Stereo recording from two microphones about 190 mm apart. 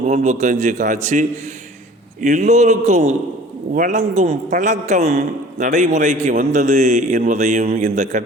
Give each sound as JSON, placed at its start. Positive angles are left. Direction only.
{"t": 0.1, "sound": "a man's voice", "side_deg": -40}